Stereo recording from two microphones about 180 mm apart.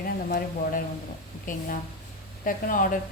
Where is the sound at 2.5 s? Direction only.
50° left (ahead or behind).